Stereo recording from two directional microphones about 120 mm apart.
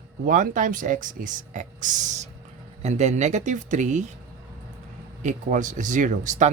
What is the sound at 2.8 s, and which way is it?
Speech, 65° right (ahead or behind).